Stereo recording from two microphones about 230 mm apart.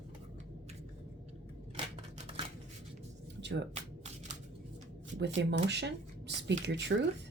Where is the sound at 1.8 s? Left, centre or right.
Right.